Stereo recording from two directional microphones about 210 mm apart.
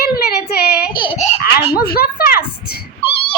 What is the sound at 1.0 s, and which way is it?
Speech, 25° left (ahead or behind).